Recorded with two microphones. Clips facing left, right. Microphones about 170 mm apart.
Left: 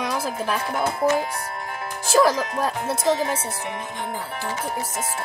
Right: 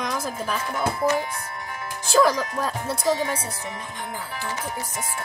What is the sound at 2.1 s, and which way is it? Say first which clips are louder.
Speech: left 1 dB; 5° left (ahead or behind).